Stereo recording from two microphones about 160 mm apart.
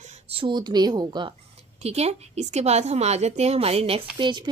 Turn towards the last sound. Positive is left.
turn(degrees=-30)  # may be behind; listen again after turning